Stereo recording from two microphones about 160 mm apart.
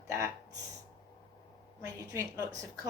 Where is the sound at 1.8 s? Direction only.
20° right (ahead or behind).